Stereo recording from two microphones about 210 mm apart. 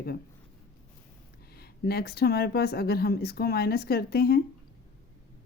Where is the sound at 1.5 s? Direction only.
50° left (ahead or behind).